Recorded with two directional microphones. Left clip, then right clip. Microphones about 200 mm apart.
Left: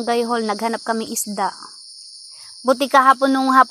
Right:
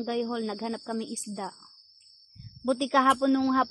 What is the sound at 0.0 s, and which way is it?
Speech, 20° left (ahead or behind).